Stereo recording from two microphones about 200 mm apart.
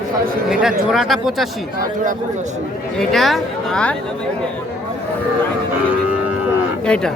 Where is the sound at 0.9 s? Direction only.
Centre (ahead or behind).